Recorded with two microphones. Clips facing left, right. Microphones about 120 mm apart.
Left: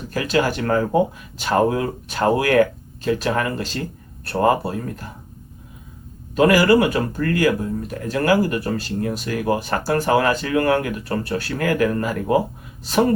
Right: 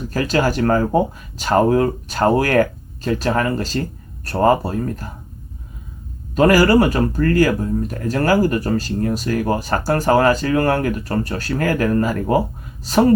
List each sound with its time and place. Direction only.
0.1 s speech: 40° right (ahead or behind)
6.3 s speech: 40° right (ahead or behind)